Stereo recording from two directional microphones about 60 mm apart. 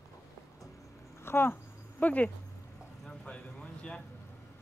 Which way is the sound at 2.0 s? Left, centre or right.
Left.